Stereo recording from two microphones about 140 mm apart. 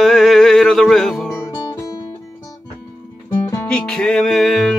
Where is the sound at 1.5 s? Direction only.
25° left (ahead or behind).